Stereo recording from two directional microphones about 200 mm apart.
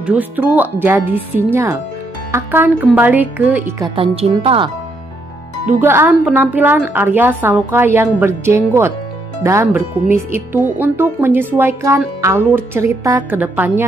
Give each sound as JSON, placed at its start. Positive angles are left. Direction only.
{"t": 0.0, "sound": "a woman's voice", "side_deg": -5}
{"t": 3.9, "sound": "speech", "side_deg": -25}
{"t": 5.7, "sound": "a woman's voice", "side_deg": -10}